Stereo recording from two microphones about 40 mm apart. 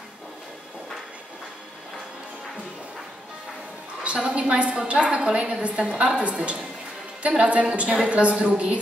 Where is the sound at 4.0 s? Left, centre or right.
Right.